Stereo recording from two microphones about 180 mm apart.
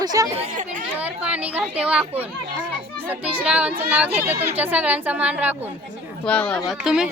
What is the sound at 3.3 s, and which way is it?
Speech, 5° right (ahead or behind).